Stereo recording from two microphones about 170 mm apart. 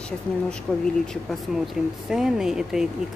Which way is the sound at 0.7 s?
Centre (ahead or behind).